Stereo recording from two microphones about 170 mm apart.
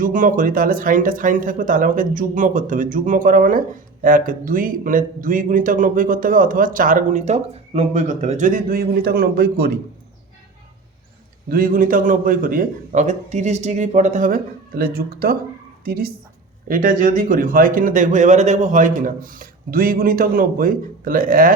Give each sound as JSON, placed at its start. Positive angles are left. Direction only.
{"t": 0.0, "sound": "speech", "side_deg": -50}
{"t": 11.4, "sound": "a woman's voice", "side_deg": -55}